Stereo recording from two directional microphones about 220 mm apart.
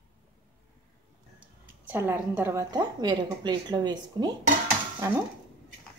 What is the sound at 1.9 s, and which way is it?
A woman's voice, 10° right (ahead or behind).